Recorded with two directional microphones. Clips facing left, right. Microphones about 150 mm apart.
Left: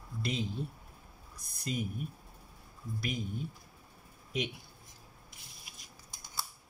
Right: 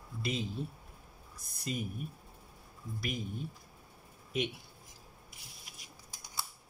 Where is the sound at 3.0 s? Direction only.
Centre (ahead or behind).